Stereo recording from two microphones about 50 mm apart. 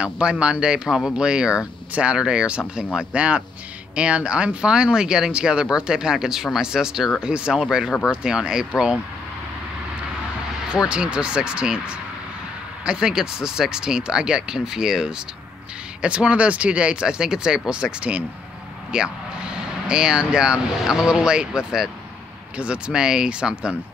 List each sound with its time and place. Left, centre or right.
0.0 s speech: right
10.9 s speech: centre